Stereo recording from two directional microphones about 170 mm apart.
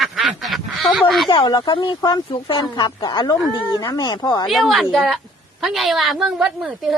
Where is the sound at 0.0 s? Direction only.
Centre (ahead or behind).